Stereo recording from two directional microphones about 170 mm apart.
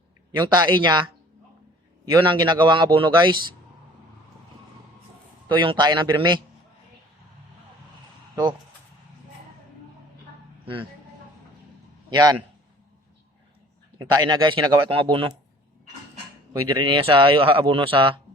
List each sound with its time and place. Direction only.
0.3 s speech: 20° right (ahead or behind)
2.2 s speech: 30° right (ahead or behind)
5.5 s speech: 30° right (ahead or behind)
12.1 s speech: 20° right (ahead or behind)
14.0 s speech: 25° right (ahead or behind)
16.5 s speech: 30° right (ahead or behind)